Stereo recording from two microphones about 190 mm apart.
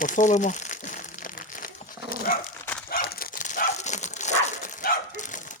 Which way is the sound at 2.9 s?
55° left (ahead or behind).